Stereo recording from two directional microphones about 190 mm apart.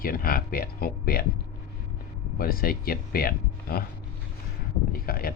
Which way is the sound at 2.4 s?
50° left (ahead or behind).